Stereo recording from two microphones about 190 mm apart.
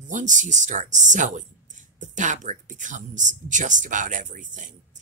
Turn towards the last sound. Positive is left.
turn(degrees=-40)  # may be behind; listen again after turning